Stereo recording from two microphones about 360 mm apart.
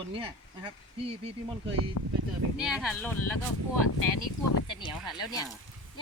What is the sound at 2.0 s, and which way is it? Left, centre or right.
Speech, left.